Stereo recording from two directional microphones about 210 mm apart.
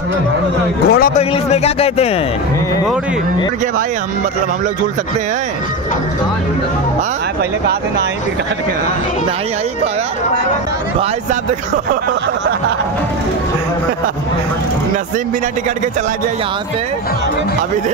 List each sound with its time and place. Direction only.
0.8 s a man's voice: 45° left (ahead or behind)
1.1 s speech: 30° left (ahead or behind)